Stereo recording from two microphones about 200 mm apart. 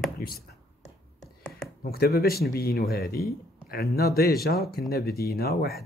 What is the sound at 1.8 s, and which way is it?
Speech, 50° left (ahead or behind).